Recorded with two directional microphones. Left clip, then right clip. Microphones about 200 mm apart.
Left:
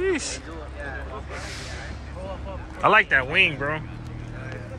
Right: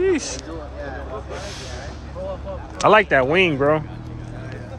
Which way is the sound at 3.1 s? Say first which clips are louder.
Right 3 dB; 30° right (ahead or behind).